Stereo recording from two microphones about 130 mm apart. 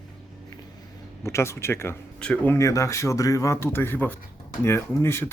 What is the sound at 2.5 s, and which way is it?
Speech, 25° left (ahead or behind).